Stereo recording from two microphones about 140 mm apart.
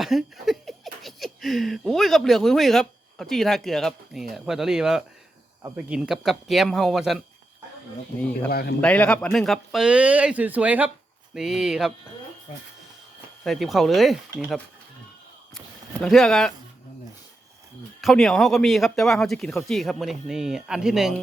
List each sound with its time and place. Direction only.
0.0 s speech: centre (ahead or behind)
8.4 s a man's voice: 90° left
8.8 s speech: 10° left (ahead or behind)
13.4 s speech: centre (ahead or behind)
15.5 s a sound: centre (ahead or behind)
18.0 s speech: centre (ahead or behind)